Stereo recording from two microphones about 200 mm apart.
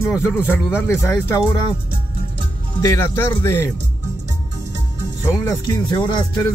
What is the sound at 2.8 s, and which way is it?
Speech, 15° left (ahead or behind).